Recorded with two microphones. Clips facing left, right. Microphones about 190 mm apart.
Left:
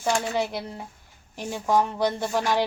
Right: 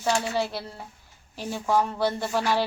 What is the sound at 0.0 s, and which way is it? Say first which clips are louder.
Speech: even; 15° left (ahead or behind).